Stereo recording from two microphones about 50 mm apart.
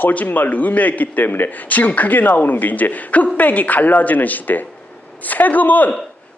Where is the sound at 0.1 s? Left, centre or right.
Left.